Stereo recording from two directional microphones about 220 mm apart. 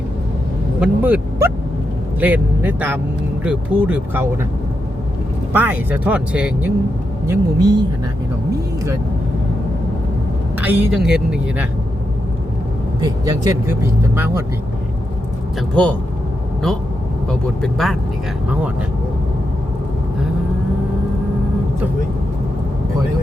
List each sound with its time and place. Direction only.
0.8 s speech: 10° right (ahead or behind)
5.5 s speech: 10° right (ahead or behind)
7.3 s speech: 15° right (ahead or behind)
10.6 s speech: 5° right (ahead or behind)
13.0 s speech: 15° right (ahead or behind)
15.7 s speech: 5° left (ahead or behind)
17.6 s speech: centre (ahead or behind)